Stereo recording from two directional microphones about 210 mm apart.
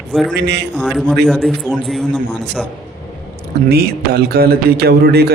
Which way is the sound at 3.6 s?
50° right (ahead or behind).